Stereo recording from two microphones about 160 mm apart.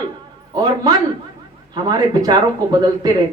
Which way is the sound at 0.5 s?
25° right (ahead or behind).